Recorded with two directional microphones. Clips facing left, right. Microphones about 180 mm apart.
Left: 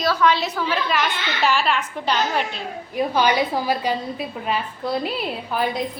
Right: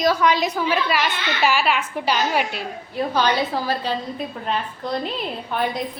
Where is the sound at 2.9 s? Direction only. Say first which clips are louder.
Left 1 dB; 15° left (ahead or behind).